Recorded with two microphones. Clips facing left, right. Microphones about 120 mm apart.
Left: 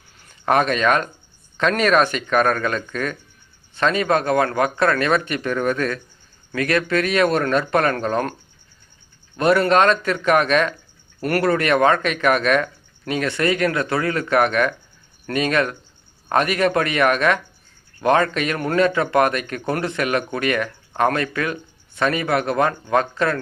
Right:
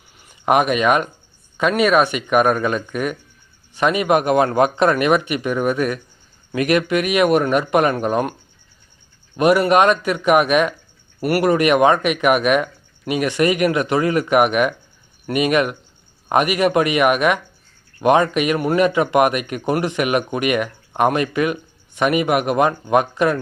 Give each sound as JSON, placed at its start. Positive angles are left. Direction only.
{"t": 0.2, "sound": "speech", "side_deg": -15}